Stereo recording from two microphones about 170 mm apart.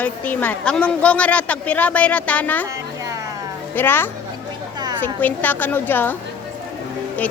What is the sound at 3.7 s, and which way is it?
A woman's voice, 10° left (ahead or behind).